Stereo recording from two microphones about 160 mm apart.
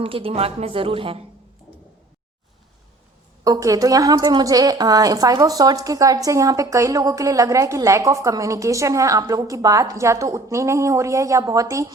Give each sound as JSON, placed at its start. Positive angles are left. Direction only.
{"t": 0.0, "sound": "speech", "side_deg": -35}
{"t": 3.4, "sound": "a woman's voice", "side_deg": -20}